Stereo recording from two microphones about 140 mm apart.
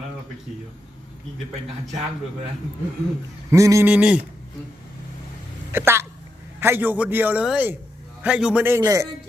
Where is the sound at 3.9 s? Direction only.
10° right (ahead or behind).